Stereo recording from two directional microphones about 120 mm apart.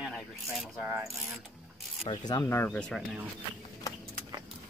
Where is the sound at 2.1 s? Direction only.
35° left (ahead or behind).